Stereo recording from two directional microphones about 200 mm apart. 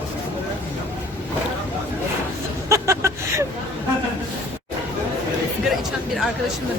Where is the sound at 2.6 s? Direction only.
15° right (ahead or behind).